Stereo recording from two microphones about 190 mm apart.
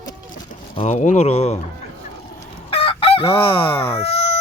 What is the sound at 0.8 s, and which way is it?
Speech, 40° left (ahead or behind).